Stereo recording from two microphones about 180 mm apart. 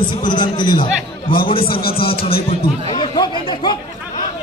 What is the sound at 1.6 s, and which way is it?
Speech, 55° left (ahead or behind).